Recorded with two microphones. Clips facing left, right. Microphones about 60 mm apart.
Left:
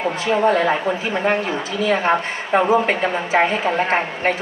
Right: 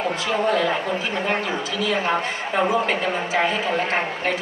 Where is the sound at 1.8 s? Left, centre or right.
Left.